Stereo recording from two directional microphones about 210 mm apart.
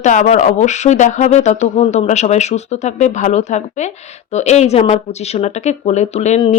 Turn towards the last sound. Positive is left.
turn(degrees=35)  # may be behind; listen again after turning